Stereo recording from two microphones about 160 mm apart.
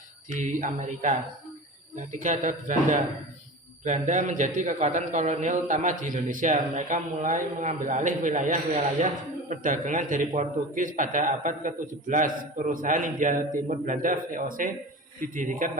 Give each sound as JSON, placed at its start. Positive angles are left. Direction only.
{"t": 0.3, "sound": "a man's voice", "side_deg": -50}